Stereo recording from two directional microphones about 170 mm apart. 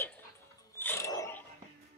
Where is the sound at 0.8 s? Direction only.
15° left (ahead or behind).